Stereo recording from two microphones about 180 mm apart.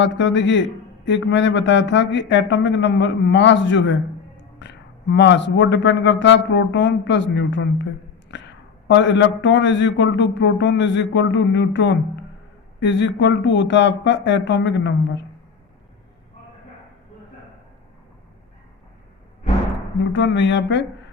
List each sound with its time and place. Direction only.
0.0 s a man's voice: 90° left
4.4 s a man's voice: 75° left (ahead or behind)
20.1 s a man's voice: 85° left